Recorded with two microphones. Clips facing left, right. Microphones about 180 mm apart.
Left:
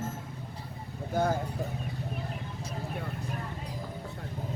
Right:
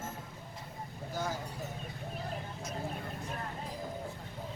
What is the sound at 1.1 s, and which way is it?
Speech, 55° left (ahead or behind).